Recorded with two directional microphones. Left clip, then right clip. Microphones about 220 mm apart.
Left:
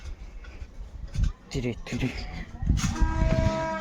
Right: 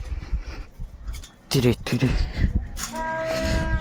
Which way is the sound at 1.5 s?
40° right (ahead or behind).